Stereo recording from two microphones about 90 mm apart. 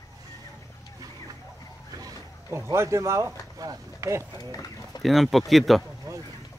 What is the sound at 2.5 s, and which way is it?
Speech, 30° right (ahead or behind).